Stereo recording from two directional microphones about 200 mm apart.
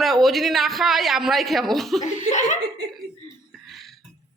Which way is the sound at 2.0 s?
35° left (ahead or behind).